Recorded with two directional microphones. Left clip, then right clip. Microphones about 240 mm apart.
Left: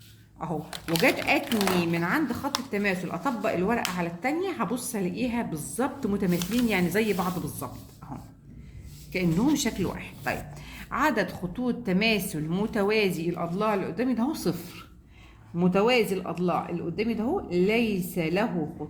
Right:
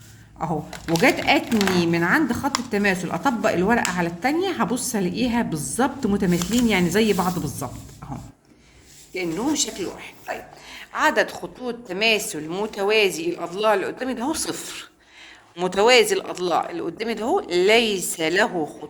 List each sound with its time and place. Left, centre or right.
1.0 s a woman's voice: centre
8.0 s dog: centre
9.1 s a woman's voice: centre; by 18.5 s right